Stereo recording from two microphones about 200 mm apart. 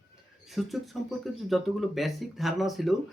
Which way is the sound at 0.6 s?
5° right (ahead or behind).